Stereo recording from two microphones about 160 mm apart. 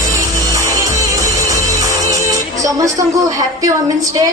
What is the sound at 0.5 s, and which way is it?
Music, 20° right (ahead or behind).